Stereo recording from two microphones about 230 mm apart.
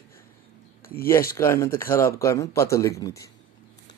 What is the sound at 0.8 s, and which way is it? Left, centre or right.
Speech, left.